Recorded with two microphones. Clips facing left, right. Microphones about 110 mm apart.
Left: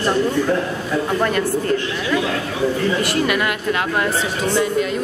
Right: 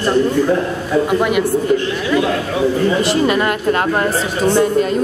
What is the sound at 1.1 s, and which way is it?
A man's voice, 10° right (ahead or behind).